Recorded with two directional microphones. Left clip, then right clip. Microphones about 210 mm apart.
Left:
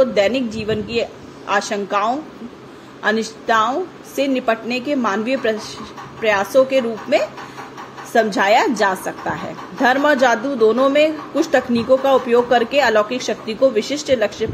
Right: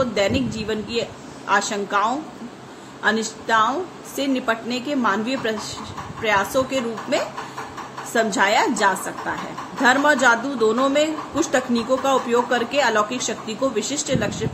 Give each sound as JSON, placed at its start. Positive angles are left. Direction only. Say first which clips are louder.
{"t": 0.0, "sound": "a woman's voice", "louder": "left 5 dB", "side_deg": 10}